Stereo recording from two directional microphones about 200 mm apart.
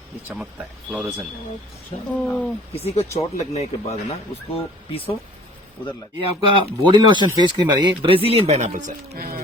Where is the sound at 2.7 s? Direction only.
30° left (ahead or behind).